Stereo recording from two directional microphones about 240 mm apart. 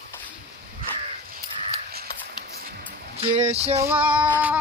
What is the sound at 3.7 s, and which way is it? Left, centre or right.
Female singing, centre.